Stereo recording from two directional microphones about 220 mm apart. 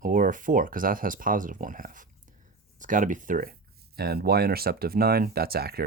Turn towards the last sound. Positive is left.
turn(degrees=-45)  # may be behind; listen again after turning